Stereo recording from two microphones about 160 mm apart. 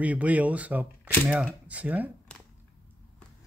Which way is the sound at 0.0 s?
10° right (ahead or behind).